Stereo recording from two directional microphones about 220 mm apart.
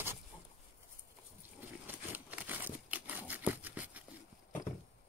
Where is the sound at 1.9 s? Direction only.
10° right (ahead or behind).